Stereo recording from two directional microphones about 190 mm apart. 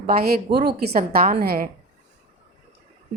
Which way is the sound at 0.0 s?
55° right (ahead or behind).